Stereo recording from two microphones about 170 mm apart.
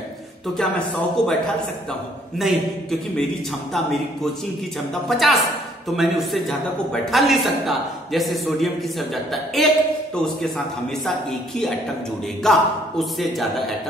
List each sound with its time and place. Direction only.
0.6 s a man's voice: 5° left (ahead or behind)
2.3 s a man's voice: centre (ahead or behind)
11.1 s a man's voice: centre (ahead or behind)